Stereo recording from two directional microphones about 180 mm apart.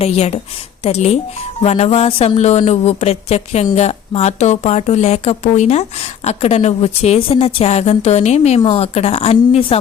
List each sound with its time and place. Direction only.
0.0 s a woman's voice: 35° left (ahead or behind)